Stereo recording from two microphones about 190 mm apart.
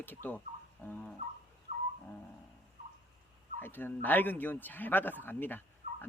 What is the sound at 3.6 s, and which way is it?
A man's voice, 10° left (ahead or behind).